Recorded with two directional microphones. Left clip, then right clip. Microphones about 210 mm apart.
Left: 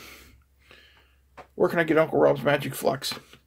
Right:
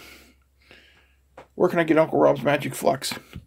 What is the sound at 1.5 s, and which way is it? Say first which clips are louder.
Speech: right 2 dB; 10° right (ahead or behind).